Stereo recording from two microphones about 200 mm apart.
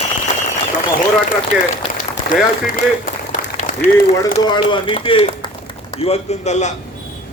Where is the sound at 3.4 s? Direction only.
40° left (ahead or behind).